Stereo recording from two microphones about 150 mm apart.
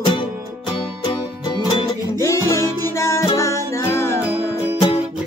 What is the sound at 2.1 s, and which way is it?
Music, 20° left (ahead or behind).